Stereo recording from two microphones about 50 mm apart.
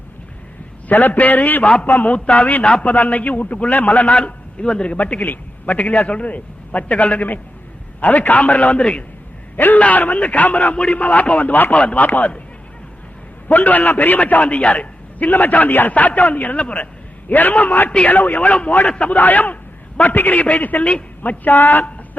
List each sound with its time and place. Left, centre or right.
0.9 s a man's voice: left
2.1 s a man's voice: left
9.6 s a man's voice: left
13.5 s a man's voice: left
19.1 s a man's voice: left